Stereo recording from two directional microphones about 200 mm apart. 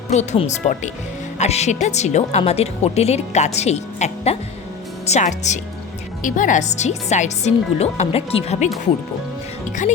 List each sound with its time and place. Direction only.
0.1 s speech: 35° left (ahead or behind)